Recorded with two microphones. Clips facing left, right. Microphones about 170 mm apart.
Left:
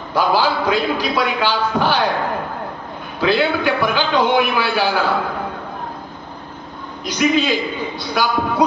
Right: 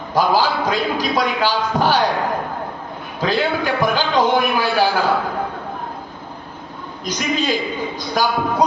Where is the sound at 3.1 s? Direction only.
40° right (ahead or behind).